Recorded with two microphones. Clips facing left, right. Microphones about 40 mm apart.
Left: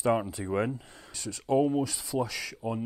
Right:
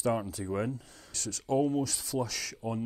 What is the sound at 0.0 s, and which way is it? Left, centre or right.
Speech, left.